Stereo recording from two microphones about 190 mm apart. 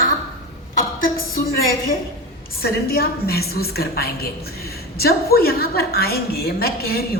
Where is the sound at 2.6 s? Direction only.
55° left (ahead or behind).